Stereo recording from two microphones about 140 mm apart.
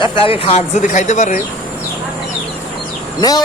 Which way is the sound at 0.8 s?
60° left (ahead or behind).